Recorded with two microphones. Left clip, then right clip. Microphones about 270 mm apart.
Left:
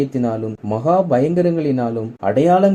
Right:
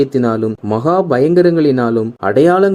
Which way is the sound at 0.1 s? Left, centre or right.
Right.